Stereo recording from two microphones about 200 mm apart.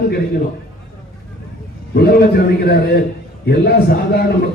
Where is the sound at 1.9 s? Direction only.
50° left (ahead or behind).